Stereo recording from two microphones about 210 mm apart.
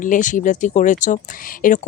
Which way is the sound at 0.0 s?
40° left (ahead or behind).